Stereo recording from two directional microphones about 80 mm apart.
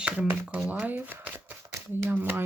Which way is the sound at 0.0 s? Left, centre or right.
Centre.